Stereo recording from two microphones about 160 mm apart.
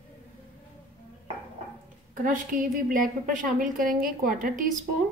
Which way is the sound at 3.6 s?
55° right (ahead or behind).